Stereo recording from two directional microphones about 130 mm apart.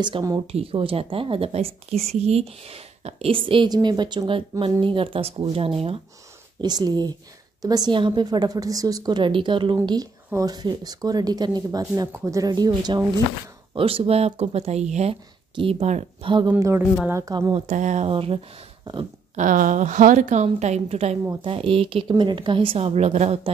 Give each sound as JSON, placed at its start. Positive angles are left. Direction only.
{"t": 0.0, "sound": "a woman's voice", "side_deg": -35}
{"t": 0.5, "sound": "speech", "side_deg": -50}
{"t": 6.6, "sound": "a woman's voice", "side_deg": -30}
{"t": 13.7, "sound": "speech", "side_deg": -45}
{"t": 15.5, "sound": "speech", "side_deg": -45}
{"t": 15.8, "sound": "a woman's voice", "side_deg": -60}
{"t": 16.2, "sound": "a woman's voice", "side_deg": -40}
{"t": 16.4, "sound": "speech", "side_deg": -20}
{"t": 17.6, "sound": "a woman's voice", "side_deg": -70}
{"t": 18.0, "sound": "speech", "side_deg": -50}
{"t": 19.3, "sound": "a woman's voice", "side_deg": -90}
{"t": 20.4, "sound": "a woman's voice", "side_deg": -60}